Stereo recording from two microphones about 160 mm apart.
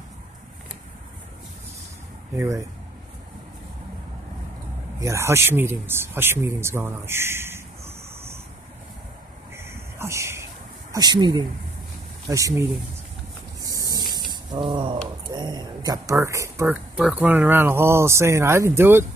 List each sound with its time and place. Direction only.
2.3 s speech: 20° right (ahead or behind)
5.0 s speech: 15° right (ahead or behind)
9.6 s a sound: 15° right (ahead or behind)
10.9 s speech: 25° right (ahead or behind)
13.6 s a sound: 20° right (ahead or behind)
16.9 s speech: 5° right (ahead or behind)